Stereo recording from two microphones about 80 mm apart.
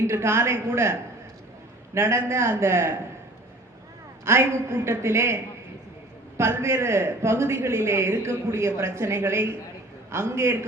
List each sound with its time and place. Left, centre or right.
0.1 s a man's voice: right
4.3 s a man's voice: right